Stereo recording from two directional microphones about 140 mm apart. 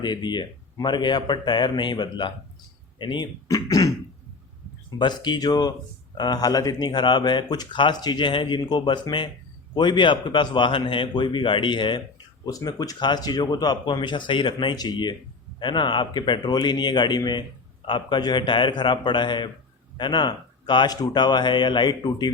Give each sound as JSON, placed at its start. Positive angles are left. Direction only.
{"t": 0.0, "sound": "speech", "side_deg": 30}
{"t": 4.9, "sound": "speech", "side_deg": 30}